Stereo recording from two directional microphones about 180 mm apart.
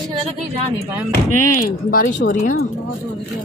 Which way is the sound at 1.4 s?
50° left (ahead or behind).